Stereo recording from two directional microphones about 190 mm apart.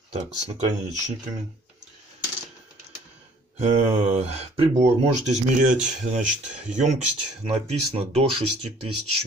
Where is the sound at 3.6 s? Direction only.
35° right (ahead or behind).